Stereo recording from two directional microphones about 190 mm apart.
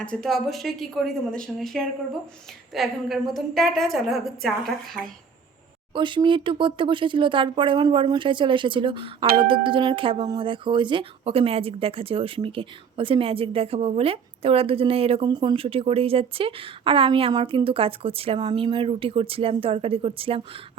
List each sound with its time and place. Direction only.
0.0 s a woman's voice: 5° left (ahead or behind)
5.9 s speech: 25° right (ahead or behind)